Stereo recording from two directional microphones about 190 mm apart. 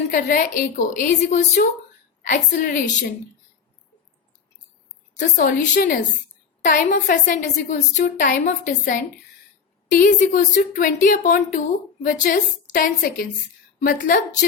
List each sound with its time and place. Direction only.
0.1 s a woman's voice: 45° left (ahead or behind)
5.2 s a woman's voice: 45° left (ahead or behind)